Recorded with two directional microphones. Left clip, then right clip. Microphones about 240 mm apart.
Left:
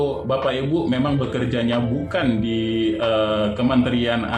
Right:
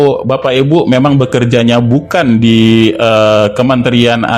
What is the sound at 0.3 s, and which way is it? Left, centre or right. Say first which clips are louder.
A man's voice: right 11 dB; right.